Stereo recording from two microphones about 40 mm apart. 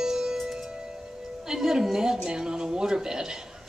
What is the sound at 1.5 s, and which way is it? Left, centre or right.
A woman's voice, centre.